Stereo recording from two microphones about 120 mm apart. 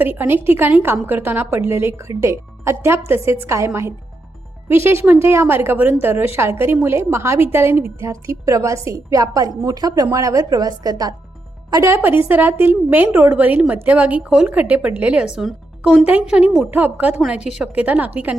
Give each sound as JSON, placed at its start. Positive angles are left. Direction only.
{"t": 0.0, "sound": "a woman's voice", "side_deg": -15}
{"t": 11.9, "sound": "a woman's voice", "side_deg": -15}